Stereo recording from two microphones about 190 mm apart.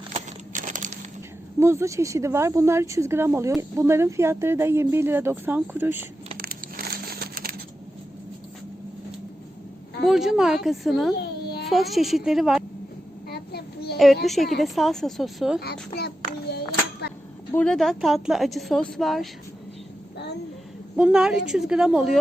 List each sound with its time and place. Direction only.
0.1 s crumpling: 40° right (ahead or behind)
1.5 s speech: 15° right (ahead or behind)
6.3 s crumpling: 50° right (ahead or behind)
10.0 s a woman's voice: centre (ahead or behind)
11.2 s baby cry: 60° left (ahead or behind)
11.7 s a woman's voice: centre (ahead or behind)
13.2 s a sound: 60° left (ahead or behind)
14.3 s a woman's voice: centre (ahead or behind)
15.6 s a child's voice: 60° left (ahead or behind)
16.5 s a sound: 60° left (ahead or behind)
17.5 s a woman's voice: 5° left (ahead or behind)
20.9 s a woman's voice: 5° right (ahead or behind)